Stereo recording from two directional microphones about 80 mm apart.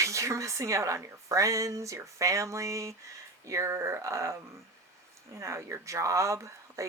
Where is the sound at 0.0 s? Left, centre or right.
Right.